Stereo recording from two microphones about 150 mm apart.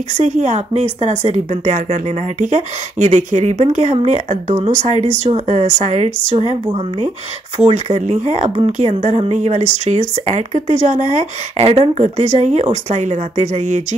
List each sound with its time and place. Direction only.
0.2 s speech: 50° right (ahead or behind)